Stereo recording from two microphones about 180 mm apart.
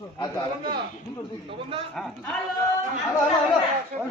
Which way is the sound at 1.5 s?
30° right (ahead or behind).